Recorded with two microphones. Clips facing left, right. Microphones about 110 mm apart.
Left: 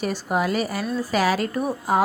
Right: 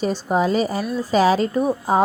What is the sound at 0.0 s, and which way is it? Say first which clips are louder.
A woman's voice: right 4 dB; 25° right (ahead or behind).